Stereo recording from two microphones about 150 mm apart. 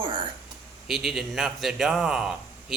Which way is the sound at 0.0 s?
35° right (ahead or behind).